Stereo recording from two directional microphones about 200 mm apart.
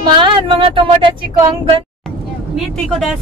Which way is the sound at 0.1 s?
25° right (ahead or behind).